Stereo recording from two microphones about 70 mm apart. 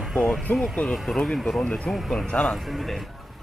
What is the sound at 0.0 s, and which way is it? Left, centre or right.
Speech, centre.